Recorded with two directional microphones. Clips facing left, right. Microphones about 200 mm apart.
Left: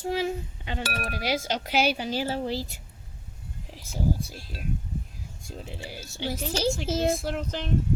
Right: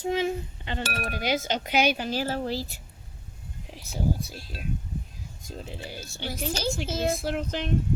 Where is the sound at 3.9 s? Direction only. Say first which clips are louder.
Even; 10° left (ahead or behind).